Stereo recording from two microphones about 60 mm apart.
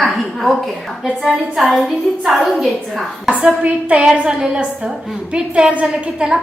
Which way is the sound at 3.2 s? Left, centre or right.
Right.